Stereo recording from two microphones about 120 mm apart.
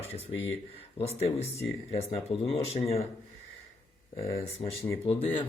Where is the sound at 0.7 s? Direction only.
55° left (ahead or behind).